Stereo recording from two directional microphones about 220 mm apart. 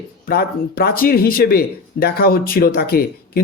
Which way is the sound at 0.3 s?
45° left (ahead or behind).